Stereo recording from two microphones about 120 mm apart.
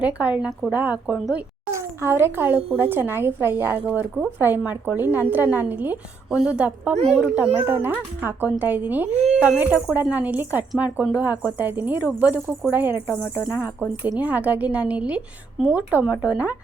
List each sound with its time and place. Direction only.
0.0 s a woman's voice: 10° right (ahead or behind)
1.7 s a child's voice: 20° right (ahead or behind)
6.9 s speech: 55° right (ahead or behind)
7.2 s a woman's voice: 15° right (ahead or behind)